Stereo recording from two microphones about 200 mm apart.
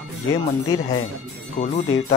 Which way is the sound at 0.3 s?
20° left (ahead or behind).